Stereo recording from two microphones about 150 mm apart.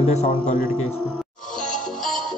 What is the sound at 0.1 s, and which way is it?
Speech, 50° left (ahead or behind).